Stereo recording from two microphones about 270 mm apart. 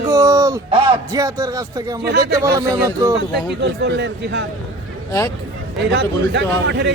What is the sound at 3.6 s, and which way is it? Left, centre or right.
Speech, right.